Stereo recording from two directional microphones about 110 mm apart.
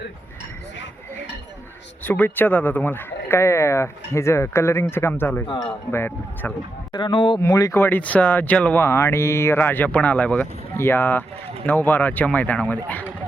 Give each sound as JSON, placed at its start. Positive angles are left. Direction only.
{"t": 2.0, "sound": "speech", "side_deg": 20}
{"t": 6.9, "sound": "speech", "side_deg": 45}
{"t": 7.3, "sound": "speech", "side_deg": 30}